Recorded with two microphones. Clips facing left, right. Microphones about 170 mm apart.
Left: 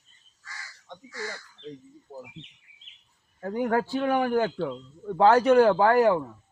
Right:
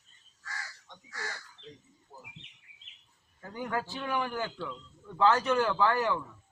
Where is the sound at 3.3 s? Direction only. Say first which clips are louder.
Left 9 dB; 55° left (ahead or behind).